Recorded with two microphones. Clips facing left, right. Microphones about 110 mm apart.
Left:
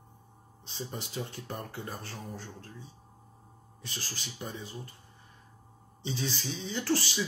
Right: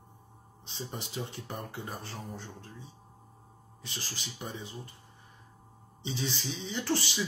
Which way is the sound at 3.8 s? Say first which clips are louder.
Even; 20° right (ahead or behind).